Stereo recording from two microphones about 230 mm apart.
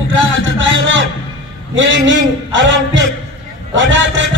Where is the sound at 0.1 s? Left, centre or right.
Right.